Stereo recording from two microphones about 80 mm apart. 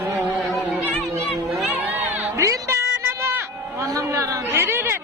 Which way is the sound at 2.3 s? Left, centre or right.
Right.